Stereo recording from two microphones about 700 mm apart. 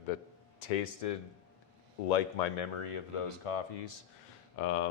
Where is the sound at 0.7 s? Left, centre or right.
Left.